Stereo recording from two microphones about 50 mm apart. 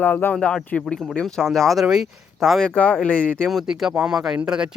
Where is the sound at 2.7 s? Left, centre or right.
Left.